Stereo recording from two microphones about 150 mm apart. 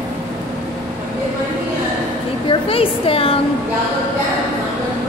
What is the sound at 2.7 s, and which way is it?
Speech, 40° left (ahead or behind).